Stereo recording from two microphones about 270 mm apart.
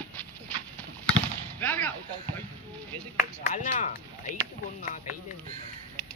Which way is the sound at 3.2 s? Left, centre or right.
Left.